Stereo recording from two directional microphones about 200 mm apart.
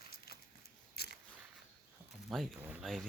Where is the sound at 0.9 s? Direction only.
50° left (ahead or behind).